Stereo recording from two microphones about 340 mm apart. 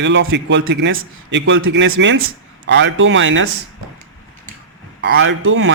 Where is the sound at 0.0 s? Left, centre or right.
Right.